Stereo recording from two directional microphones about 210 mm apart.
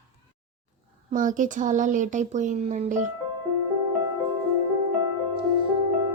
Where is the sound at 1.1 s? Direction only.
40° right (ahead or behind).